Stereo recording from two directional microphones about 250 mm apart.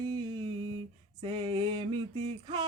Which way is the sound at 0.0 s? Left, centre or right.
Centre.